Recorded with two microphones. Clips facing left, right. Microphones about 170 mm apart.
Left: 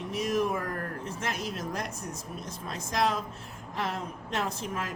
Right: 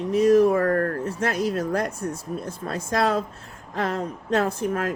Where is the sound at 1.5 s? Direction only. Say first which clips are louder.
Right 10 dB; 60° right (ahead or behind).